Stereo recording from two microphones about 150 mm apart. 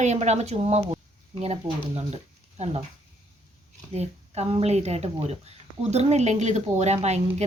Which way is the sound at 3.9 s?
45° right (ahead or behind).